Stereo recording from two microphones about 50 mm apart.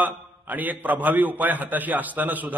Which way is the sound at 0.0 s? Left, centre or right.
Right.